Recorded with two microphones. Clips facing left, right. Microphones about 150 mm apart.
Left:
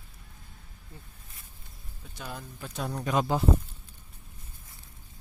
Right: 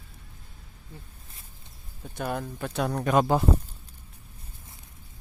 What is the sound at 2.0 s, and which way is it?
Speech, 55° right (ahead or behind).